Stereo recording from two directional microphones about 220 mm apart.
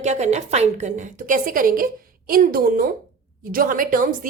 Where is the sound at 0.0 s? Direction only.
30° right (ahead or behind).